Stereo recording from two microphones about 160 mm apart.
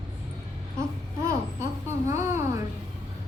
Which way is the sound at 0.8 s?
20° right (ahead or behind).